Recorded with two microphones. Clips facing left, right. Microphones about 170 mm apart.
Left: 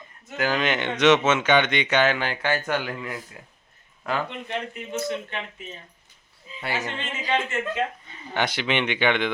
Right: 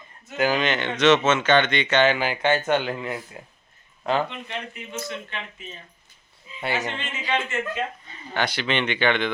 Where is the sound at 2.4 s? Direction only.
25° right (ahead or behind).